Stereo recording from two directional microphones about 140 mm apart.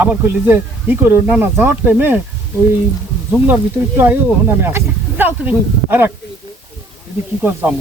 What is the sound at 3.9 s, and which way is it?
Speech, 15° right (ahead or behind).